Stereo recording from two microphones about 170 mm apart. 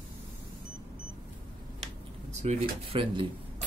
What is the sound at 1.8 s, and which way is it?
Speech, 40° right (ahead or behind).